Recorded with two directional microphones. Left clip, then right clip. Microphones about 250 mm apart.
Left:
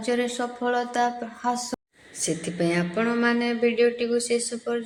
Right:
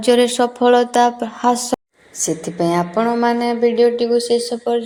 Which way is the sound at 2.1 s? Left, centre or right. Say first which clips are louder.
Right 7 dB; centre.